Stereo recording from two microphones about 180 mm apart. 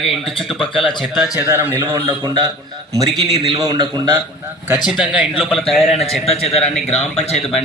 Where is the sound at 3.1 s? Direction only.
Centre (ahead or behind).